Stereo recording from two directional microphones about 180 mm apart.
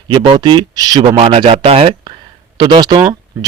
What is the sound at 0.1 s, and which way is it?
A man's voice, 25° right (ahead or behind).